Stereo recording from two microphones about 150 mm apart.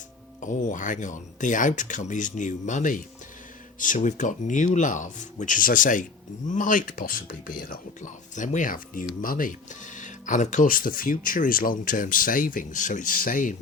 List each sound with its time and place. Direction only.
0.4 s speech: 60° left (ahead or behind)